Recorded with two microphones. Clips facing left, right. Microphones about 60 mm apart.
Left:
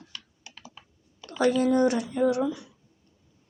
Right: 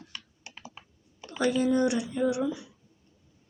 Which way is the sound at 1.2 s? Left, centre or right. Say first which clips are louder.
Left 3 dB; left.